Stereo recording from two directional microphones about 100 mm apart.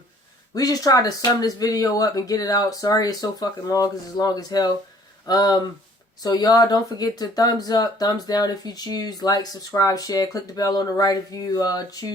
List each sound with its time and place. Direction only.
0.5 s speech: 40° left (ahead or behind)